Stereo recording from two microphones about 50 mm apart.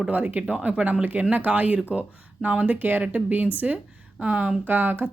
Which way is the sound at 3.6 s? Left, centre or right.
Centre.